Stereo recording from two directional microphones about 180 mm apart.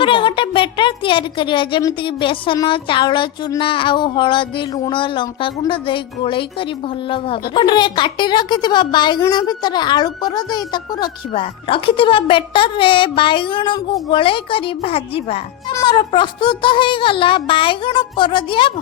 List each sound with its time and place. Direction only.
0.0 s speech: 30° left (ahead or behind)